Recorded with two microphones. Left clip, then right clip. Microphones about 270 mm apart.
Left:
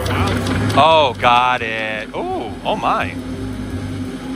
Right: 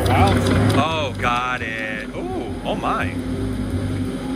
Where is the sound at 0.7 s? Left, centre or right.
Centre.